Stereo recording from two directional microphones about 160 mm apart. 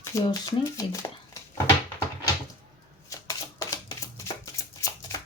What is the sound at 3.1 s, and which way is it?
Shuffling cards, 20° left (ahead or behind).